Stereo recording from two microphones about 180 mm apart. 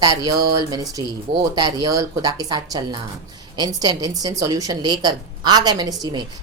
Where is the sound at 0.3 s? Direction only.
20° right (ahead or behind).